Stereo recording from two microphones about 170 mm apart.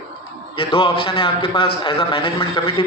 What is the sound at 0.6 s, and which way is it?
A man's voice, 30° left (ahead or behind).